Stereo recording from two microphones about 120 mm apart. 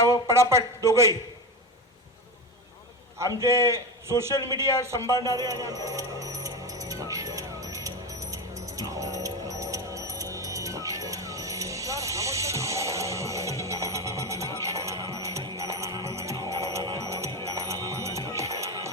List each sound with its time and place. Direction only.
0.3 s a man's voice: 25° right (ahead or behind)
3.2 s a man's voice: 25° right (ahead or behind)
5.1 s a man's voice: 30° left (ahead or behind)
5.4 s music: 30° right (ahead or behind)